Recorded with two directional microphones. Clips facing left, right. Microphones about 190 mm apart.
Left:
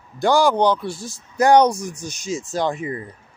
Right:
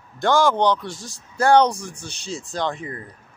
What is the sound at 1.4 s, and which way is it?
Speech, 15° left (ahead or behind).